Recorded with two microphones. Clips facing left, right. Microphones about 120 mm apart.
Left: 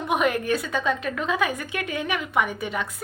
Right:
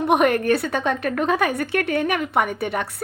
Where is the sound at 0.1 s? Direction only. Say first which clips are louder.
Right 5 dB; 55° right (ahead or behind).